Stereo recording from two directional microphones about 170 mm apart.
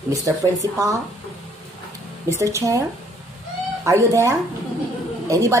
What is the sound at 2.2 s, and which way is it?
Speech, 15° right (ahead or behind).